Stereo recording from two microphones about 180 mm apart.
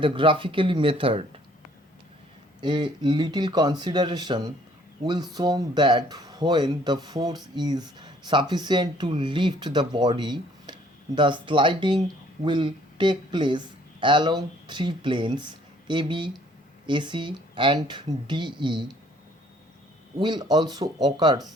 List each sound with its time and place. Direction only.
0.0 s speech: 30° right (ahead or behind)
2.6 s speech: 25° right (ahead or behind)
20.1 s speech: 25° right (ahead or behind)